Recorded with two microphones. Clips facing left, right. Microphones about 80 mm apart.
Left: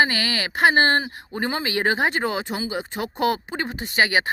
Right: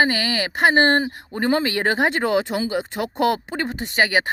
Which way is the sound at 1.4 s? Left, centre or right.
Right.